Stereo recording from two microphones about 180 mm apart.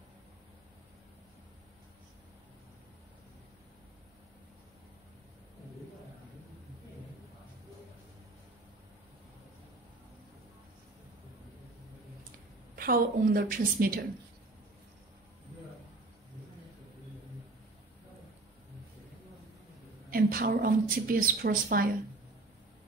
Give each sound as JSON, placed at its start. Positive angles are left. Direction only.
{"t": 12.7, "sound": "a woman's voice", "side_deg": -55}
{"t": 20.1, "sound": "a woman's voice", "side_deg": -55}